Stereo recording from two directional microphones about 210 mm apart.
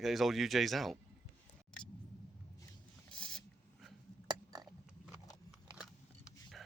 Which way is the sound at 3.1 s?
5° left (ahead or behind).